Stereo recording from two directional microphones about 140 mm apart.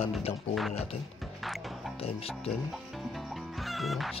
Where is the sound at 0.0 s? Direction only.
40° left (ahead or behind).